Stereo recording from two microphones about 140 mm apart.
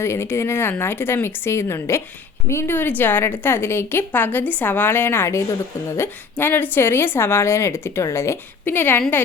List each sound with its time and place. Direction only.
0.0 s a woman's voice: 20° left (ahead or behind)